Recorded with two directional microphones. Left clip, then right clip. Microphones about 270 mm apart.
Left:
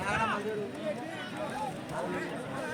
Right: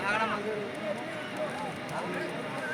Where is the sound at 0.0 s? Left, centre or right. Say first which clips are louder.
Right 2 dB; left.